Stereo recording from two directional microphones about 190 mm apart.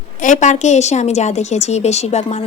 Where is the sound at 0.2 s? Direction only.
40° left (ahead or behind).